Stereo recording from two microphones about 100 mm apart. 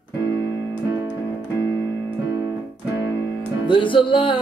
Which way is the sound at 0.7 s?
20° right (ahead or behind).